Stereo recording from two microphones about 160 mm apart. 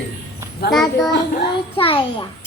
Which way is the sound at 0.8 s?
25° left (ahead or behind).